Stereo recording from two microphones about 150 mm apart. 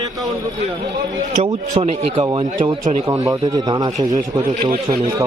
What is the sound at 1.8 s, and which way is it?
Speech, 40° right (ahead or behind).